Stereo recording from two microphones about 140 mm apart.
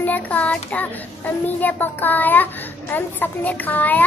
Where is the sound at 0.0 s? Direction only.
10° left (ahead or behind).